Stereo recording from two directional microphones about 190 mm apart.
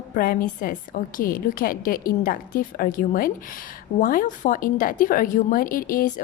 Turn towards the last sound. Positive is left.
turn(degrees=50)  # may be behind; listen again after turning